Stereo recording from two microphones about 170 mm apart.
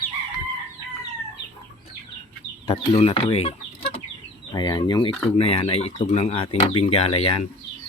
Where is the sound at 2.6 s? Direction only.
30° left (ahead or behind).